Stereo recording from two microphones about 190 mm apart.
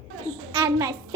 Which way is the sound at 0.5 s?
20° right (ahead or behind).